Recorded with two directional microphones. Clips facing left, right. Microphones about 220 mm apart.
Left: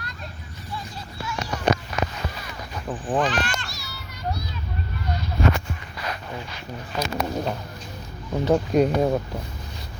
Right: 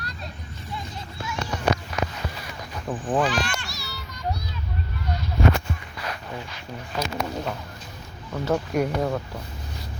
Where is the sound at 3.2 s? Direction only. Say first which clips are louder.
Even; 10° right (ahead or behind).